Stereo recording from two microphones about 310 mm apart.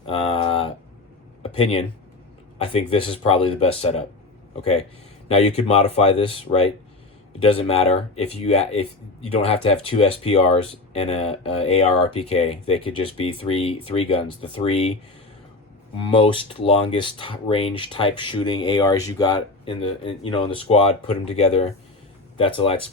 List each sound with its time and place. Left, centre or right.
0.1 s a sound: centre
2.6 s speech: centre
16.0 s speech: centre